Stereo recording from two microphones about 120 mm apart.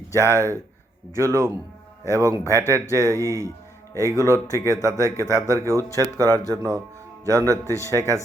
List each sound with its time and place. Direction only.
0.2 s a man's voice: 20° right (ahead or behind)